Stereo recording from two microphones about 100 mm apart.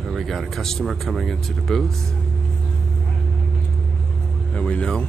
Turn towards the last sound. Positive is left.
turn(degrees=10)  # may be behind; listen again after turning